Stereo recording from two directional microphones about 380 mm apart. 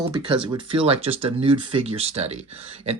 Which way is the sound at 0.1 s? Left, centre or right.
Centre.